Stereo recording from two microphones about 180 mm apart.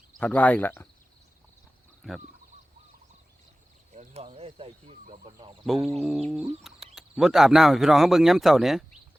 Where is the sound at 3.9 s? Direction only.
40° right (ahead or behind).